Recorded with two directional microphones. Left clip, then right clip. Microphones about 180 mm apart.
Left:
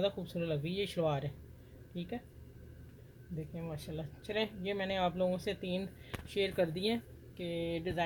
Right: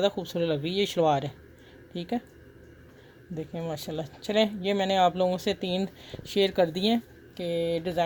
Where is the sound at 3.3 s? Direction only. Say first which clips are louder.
Right 11 dB; 55° right (ahead or behind).